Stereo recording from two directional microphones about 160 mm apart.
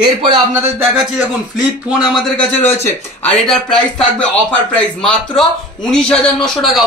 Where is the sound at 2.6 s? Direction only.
10° left (ahead or behind).